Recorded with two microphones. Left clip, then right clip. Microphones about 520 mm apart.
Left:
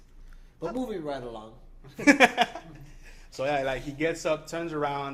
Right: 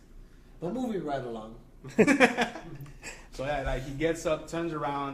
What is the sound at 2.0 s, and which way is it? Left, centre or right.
A man's voice, left.